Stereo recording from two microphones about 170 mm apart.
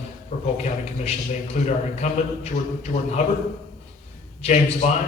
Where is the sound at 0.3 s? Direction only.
45° left (ahead or behind).